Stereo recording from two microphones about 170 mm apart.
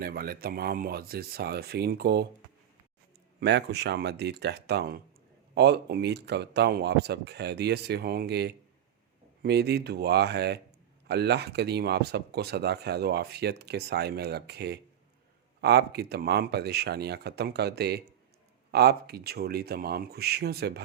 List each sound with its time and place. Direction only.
0.0 s speech: 65° right (ahead or behind)
3.4 s speech: 85° right